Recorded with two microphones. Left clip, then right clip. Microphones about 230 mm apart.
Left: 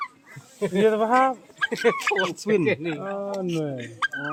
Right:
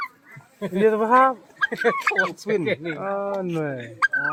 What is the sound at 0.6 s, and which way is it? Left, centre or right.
Speech, left.